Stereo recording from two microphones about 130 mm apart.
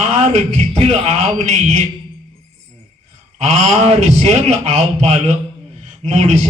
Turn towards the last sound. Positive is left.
turn(degrees=-60)  # may be behind; listen again after turning